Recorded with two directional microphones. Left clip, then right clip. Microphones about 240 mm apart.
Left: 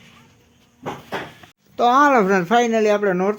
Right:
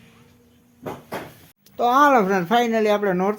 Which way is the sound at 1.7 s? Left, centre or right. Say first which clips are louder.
Left 3 dB; centre.